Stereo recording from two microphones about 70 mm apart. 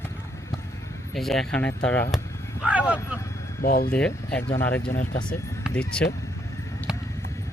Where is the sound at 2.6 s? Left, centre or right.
Centre.